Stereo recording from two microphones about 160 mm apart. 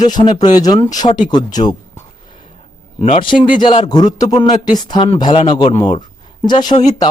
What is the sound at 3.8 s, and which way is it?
Speech, 25° left (ahead or behind).